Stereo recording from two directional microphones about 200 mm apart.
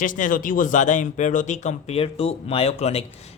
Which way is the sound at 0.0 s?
40° left (ahead or behind).